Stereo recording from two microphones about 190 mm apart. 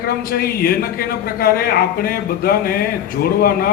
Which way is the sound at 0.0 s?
55° left (ahead or behind).